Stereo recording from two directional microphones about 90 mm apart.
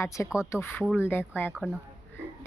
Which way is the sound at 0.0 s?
35° left (ahead or behind).